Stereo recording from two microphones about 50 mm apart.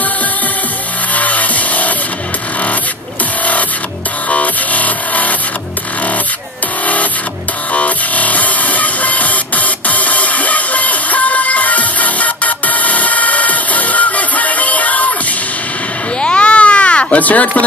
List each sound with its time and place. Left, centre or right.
1.1 s music: left
4.3 s music: left
7.7 s music: left
16.2 s baby cry: left